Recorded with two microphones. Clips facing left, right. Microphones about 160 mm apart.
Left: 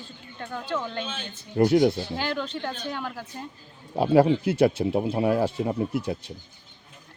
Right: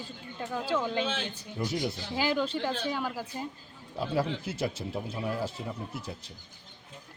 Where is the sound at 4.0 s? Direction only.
65° left (ahead or behind).